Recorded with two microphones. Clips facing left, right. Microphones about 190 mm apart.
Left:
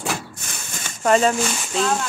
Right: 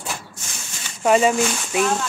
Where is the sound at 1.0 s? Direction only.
5° right (ahead or behind).